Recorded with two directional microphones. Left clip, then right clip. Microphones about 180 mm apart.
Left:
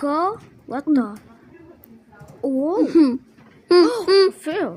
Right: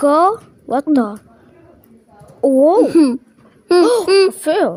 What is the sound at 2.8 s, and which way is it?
A child's voice, 20° right (ahead or behind).